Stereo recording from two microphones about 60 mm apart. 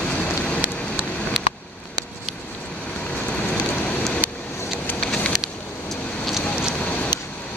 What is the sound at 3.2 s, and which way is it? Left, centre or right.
Rain on surface, left.